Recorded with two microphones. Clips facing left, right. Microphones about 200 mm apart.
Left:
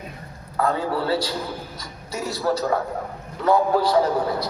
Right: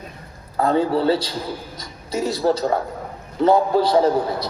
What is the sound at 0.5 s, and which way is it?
A man's voice, 25° right (ahead or behind).